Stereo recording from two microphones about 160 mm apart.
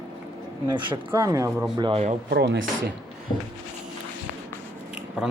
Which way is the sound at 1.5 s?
5° right (ahead or behind).